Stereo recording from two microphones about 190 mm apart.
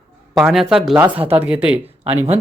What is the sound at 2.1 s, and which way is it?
Speech, 35° right (ahead or behind).